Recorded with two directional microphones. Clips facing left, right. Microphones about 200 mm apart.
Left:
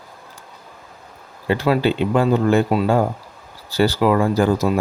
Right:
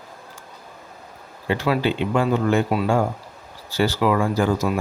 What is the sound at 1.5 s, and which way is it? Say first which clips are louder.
Speech: left 3 dB; 35° left (ahead or behind).